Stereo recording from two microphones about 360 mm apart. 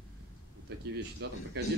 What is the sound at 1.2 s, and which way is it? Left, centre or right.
Speech, right.